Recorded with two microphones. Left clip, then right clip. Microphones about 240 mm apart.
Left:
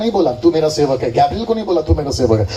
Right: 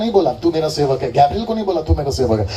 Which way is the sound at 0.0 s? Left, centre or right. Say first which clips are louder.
Left 1 dB; right.